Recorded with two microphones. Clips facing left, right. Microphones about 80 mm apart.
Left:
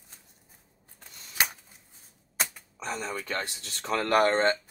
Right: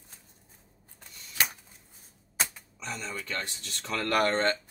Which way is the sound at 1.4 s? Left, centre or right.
Centre.